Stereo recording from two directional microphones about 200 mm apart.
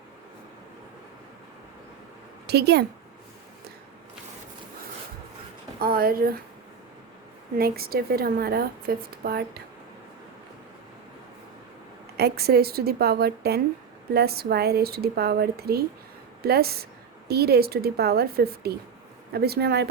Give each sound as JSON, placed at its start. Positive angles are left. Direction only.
{"t": 2.5, "sound": "a woman's voice", "side_deg": -55}
{"t": 5.8, "sound": "a woman's voice", "side_deg": -50}
{"t": 7.6, "sound": "a woman's voice", "side_deg": -50}
{"t": 12.1, "sound": "a woman's voice", "side_deg": -50}